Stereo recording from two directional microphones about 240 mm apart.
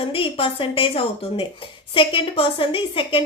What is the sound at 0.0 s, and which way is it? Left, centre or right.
A woman's voice, left.